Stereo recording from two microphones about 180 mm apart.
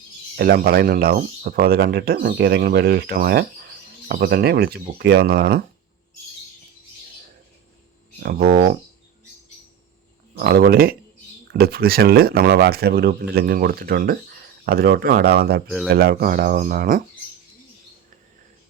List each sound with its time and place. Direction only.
0.3 s speech: 60° right (ahead or behind)
8.2 s speech: 55° right (ahead or behind)
10.3 s speech: 60° right (ahead or behind)